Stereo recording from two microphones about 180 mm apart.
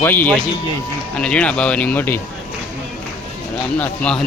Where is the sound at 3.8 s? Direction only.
5° left (ahead or behind).